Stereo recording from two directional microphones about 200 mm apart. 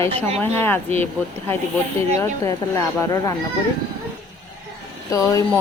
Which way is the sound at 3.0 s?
20° left (ahead or behind).